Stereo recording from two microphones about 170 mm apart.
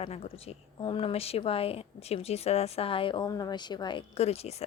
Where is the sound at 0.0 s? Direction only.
35° left (ahead or behind).